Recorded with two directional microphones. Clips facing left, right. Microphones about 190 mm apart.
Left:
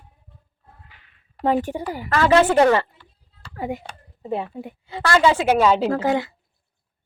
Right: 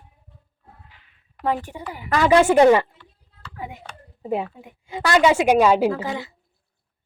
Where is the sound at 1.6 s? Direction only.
30° left (ahead or behind).